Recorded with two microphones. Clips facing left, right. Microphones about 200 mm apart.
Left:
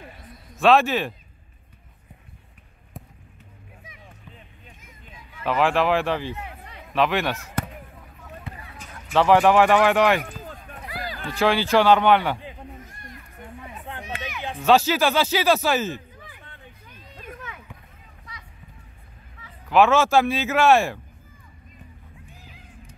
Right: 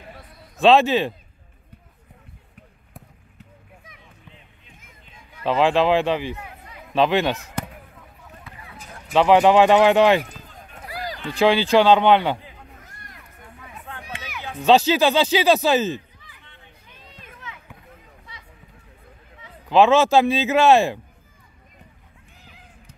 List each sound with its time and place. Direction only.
0.6 s speech: 20° right (ahead or behind)
5.4 s speech: 25° right (ahead or behind)
9.1 s speech: 20° right (ahead or behind)
10.9 s run: 40° right (ahead or behind)
11.3 s speech: 15° right (ahead or behind)
13.8 s run: 20° left (ahead or behind)
14.6 s speech: 20° right (ahead or behind)
16.2 s a sound: 50° left (ahead or behind)
17.2 s run: 50° left (ahead or behind)
19.7 s speech: 20° right (ahead or behind)